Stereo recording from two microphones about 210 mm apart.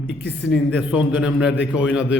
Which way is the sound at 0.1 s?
55° left (ahead or behind).